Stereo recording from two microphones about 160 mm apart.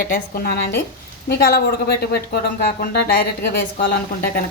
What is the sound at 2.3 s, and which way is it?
Speech, 80° left.